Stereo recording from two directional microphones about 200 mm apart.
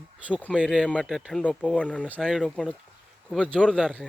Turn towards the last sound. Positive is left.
turn(degrees=5)  # may be behind; listen again after turning